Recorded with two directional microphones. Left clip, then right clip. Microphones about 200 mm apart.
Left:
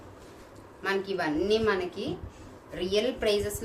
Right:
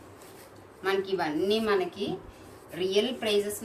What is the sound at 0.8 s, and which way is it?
A woman's voice, 50° left (ahead or behind).